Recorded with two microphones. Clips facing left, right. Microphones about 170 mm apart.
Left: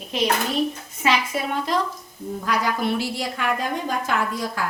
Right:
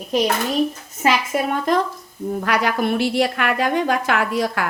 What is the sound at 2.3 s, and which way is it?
A woman's voice, 70° right (ahead or behind).